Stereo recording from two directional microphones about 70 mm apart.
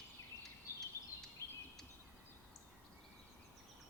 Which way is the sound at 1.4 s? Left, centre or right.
Right.